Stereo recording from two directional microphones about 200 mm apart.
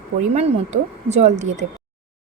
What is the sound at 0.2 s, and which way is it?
Speech, 35° right (ahead or behind).